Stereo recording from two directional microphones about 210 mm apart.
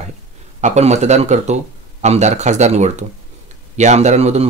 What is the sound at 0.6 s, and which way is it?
Speech, 30° right (ahead or behind).